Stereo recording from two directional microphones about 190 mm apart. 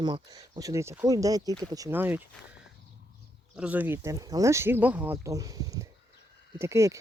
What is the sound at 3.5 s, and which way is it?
Speech, 5° right (ahead or behind).